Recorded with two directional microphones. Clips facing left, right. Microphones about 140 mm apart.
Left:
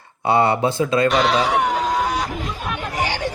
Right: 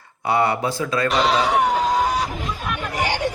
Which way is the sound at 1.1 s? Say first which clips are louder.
Left 1 dB; centre (ahead or behind).